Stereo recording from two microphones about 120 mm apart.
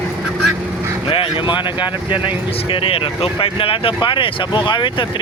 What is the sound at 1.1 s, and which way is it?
Speech, 45° left (ahead or behind).